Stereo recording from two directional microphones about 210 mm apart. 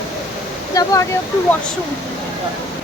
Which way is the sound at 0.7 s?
15° left (ahead or behind).